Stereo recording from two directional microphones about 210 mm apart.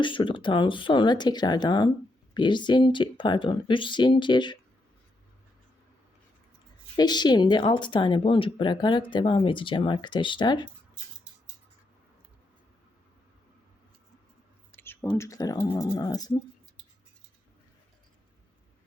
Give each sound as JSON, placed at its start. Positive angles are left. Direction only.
{"t": 0.0, "sound": "speech", "side_deg": 25}
{"t": 6.9, "sound": "speech", "side_deg": 20}
{"t": 14.7, "sound": "speech", "side_deg": 10}